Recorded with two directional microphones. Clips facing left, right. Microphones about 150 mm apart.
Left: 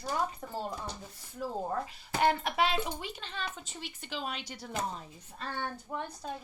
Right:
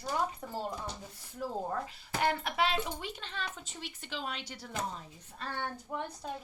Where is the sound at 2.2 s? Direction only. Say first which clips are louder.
Left 3 dB; 20° left (ahead or behind).